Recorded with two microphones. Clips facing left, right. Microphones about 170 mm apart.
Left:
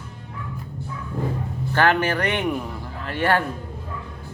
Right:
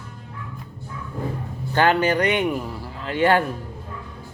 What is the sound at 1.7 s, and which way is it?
Speech, 15° right (ahead or behind).